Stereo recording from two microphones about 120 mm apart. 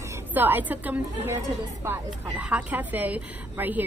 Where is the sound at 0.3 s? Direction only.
15° right (ahead or behind).